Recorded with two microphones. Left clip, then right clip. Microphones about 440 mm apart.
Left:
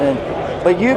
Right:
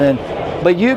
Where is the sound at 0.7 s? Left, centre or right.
Right.